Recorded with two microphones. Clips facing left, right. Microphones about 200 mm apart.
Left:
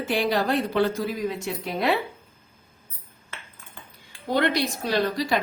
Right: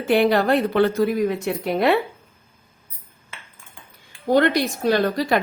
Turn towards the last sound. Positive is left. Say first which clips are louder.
# right 4 dB
turn(degrees=-55)  # may be behind; listen again after turning